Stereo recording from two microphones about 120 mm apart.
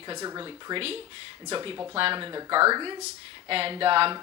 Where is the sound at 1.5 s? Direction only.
45° right (ahead or behind).